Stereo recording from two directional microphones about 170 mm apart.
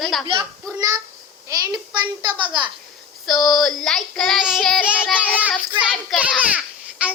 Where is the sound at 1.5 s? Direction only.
25° right (ahead or behind).